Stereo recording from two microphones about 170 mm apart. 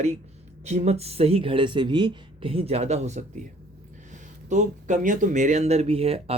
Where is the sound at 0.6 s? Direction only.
40° right (ahead or behind).